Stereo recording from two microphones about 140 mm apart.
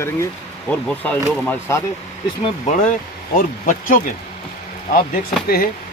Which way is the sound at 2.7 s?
60° left (ahead or behind).